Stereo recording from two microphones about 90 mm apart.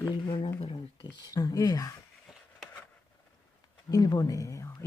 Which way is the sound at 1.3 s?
40° left (ahead or behind).